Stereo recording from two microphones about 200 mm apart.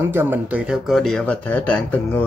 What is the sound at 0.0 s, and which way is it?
Speech, 10° right (ahead or behind).